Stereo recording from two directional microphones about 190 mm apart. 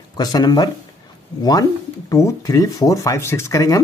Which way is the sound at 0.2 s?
20° left (ahead or behind).